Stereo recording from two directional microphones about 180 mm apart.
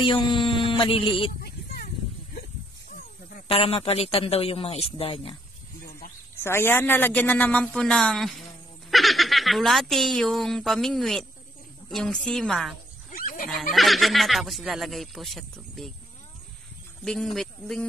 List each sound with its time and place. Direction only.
0.0 s a sound: 25° left (ahead or behind)
1.4 s a sound: 60° left (ahead or behind)
3.4 s a man's voice: 30° left (ahead or behind)
6.3 s a man's voice: 15° left (ahead or behind)
13.1 s pig: 50° left (ahead or behind)
13.5 s speech: centre (ahead or behind)
17.0 s speech: centre (ahead or behind)